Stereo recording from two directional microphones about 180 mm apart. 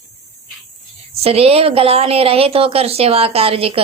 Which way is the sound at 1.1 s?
35° right (ahead or behind).